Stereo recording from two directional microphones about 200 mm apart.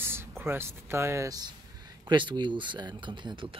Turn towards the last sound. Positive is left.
turn(degrees=-25)  # may be behind; listen again after turning